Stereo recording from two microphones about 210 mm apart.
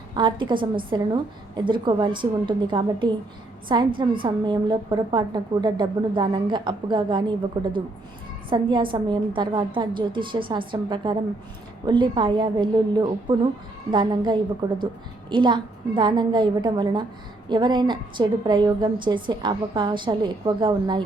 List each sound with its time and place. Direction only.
0.2 s a woman's voice: 20° right (ahead or behind)